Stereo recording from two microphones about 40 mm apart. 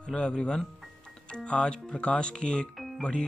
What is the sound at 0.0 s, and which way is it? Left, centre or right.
Speech, left.